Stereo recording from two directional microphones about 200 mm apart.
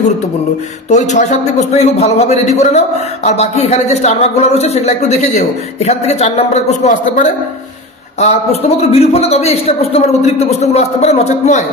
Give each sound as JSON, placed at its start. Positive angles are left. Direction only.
{"t": 0.8, "sound": "speech", "side_deg": 35}